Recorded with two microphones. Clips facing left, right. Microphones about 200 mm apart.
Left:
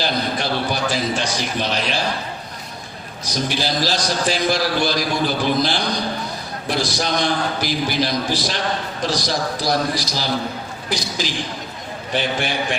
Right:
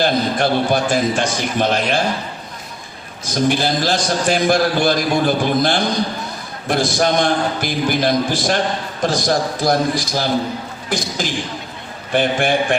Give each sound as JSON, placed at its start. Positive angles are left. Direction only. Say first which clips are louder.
{"t": 0.0, "sound": "a man's voice", "louder": "right 6 dB", "side_deg": -50}
{"t": 3.5, "sound": "a man's voice", "louder": "right 4 dB", "side_deg": -55}